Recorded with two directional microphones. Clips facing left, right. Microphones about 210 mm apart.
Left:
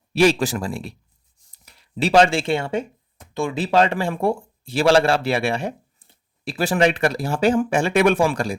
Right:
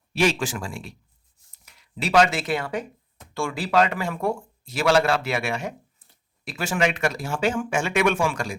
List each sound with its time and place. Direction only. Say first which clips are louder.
0.1 s speech: left 6 dB; 35° left (ahead or behind)